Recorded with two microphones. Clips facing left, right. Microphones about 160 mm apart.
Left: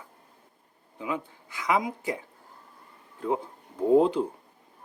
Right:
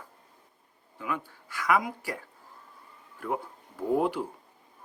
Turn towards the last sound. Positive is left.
turn(degrees=20)  # may be behind; listen again after turning